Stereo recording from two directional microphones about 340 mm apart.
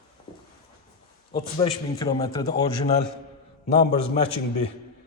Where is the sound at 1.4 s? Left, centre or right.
Centre.